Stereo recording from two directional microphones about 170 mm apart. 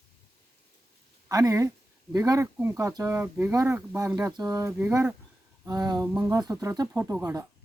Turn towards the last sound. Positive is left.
turn(degrees=-15)  # may be behind; listen again after turning